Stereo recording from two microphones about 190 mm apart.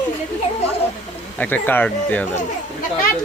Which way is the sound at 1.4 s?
10° left (ahead or behind).